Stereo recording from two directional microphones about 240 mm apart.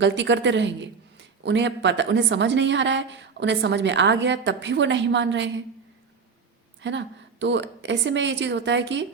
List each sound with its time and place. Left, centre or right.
0.0 s a woman's voice: right
6.8 s a woman's voice: right